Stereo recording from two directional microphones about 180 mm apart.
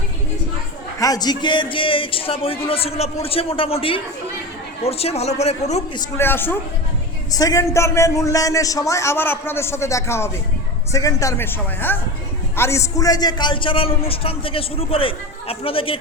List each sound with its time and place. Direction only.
0.9 s a man's voice: 20° left (ahead or behind); by 6.0 s 35° left (ahead or behind)
6.0 s a man's voice: 15° left (ahead or behind); by 16.0 s 30° left (ahead or behind)